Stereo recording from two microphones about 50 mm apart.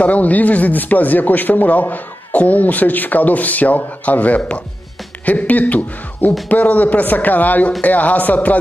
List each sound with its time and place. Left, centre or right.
0.0 s speech: left